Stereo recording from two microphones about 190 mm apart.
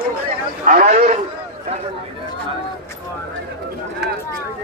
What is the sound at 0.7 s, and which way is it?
Speech, 40° right (ahead or behind).